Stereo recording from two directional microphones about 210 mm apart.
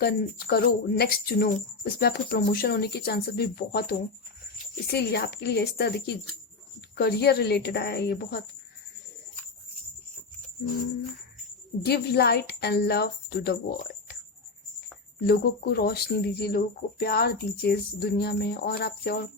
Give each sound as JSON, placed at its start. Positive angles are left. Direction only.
{"t": 0.0, "sound": "speech", "side_deg": 45}
{"t": 6.9, "sound": "speech", "side_deg": 50}
{"t": 11.8, "sound": "speech", "side_deg": 50}
{"t": 15.3, "sound": "speech", "side_deg": 50}